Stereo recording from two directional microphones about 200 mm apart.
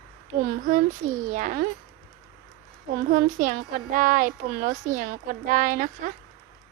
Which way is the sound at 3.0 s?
45° right (ahead or behind).